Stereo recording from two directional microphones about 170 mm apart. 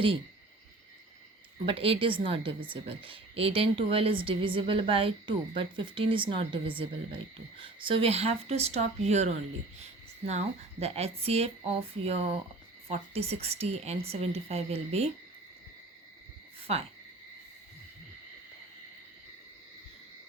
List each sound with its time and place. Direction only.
1.6 s a woman's voice: 35° right (ahead or behind)
10.2 s a woman's voice: 40° right (ahead or behind)
16.7 s a woman's voice: 35° right (ahead or behind)